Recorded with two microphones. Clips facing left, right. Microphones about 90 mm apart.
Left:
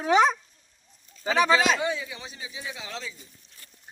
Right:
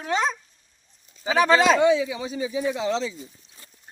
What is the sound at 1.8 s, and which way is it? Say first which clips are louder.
Speech: right 10 dB; 90° right.